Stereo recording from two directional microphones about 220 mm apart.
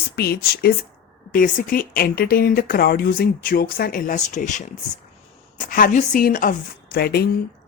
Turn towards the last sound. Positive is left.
turn(degrees=45)  # may be behind; listen again after turning